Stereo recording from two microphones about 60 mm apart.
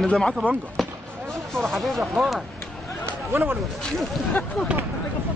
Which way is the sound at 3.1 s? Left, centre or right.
Right.